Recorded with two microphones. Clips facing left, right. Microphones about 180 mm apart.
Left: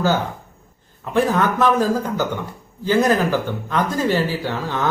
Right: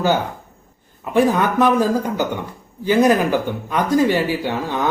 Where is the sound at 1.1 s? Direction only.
15° right (ahead or behind).